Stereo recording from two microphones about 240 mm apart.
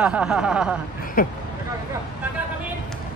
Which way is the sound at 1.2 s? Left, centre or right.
Left.